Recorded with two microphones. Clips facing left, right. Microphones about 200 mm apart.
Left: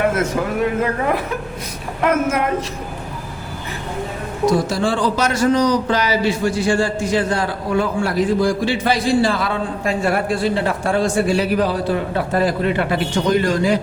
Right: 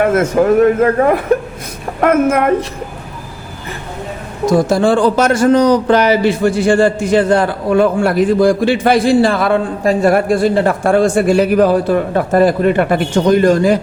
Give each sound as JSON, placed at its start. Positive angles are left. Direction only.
{"t": 0.0, "sound": "a man's voice", "side_deg": -50}
{"t": 4.4, "sound": "a man's voice", "side_deg": -50}
{"t": 9.8, "sound": "speech", "side_deg": -40}